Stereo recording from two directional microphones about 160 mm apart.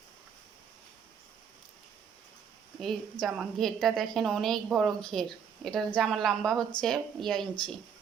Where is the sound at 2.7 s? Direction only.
Centre (ahead or behind).